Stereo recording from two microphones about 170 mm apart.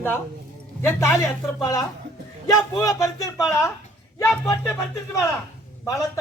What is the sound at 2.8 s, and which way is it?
Speech, 20° left (ahead or behind).